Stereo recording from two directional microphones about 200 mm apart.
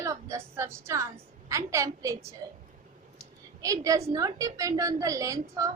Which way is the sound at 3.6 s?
15° right (ahead or behind).